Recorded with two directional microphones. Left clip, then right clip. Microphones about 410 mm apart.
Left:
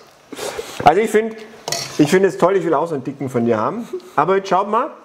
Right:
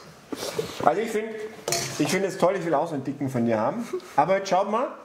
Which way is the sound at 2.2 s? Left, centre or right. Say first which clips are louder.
Left 7 dB; left.